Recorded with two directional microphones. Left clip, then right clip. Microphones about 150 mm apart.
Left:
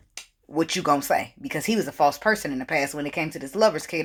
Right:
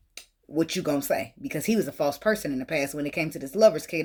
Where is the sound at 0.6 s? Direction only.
20° right (ahead or behind).